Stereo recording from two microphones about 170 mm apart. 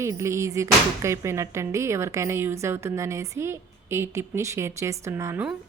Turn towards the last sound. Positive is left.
turn(degrees=-10)  # may be behind; listen again after turning